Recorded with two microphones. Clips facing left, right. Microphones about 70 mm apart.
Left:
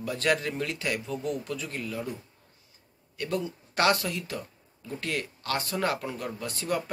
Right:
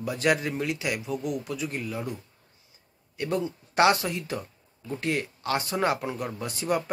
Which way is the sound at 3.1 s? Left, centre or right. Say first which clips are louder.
Right 3 dB; right.